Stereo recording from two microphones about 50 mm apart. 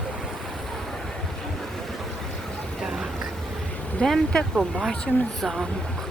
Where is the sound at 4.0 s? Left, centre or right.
Left.